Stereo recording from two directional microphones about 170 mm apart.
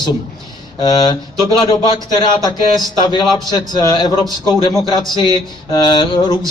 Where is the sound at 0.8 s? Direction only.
25° left (ahead or behind).